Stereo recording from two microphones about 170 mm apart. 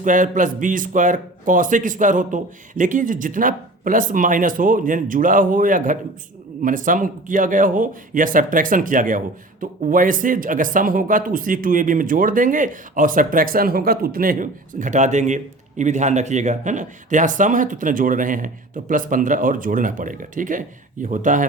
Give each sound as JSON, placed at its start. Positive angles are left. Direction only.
{"t": 0.0, "sound": "speech", "side_deg": -50}